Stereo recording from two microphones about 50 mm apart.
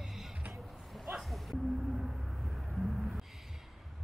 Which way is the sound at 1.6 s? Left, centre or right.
Centre.